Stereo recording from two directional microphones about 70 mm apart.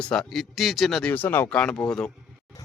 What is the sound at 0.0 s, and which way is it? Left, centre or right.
A man's voice, centre.